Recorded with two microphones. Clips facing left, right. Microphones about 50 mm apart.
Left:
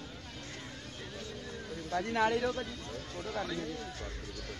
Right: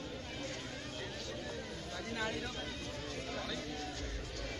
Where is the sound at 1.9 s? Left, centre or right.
Left.